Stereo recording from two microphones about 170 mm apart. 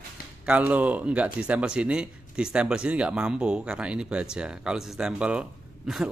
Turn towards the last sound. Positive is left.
turn(degrees=0)  # may be behind; listen again after turning